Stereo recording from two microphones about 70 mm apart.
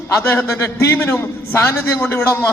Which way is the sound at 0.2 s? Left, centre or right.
Left.